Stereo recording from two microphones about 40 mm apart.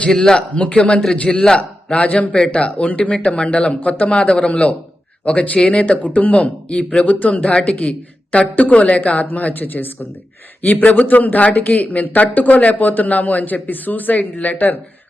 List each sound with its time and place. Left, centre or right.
0.1 s speech: centre
0.5 s a man's voice: left
2.4 s a man's voice: left
3.8 s a man's voice: left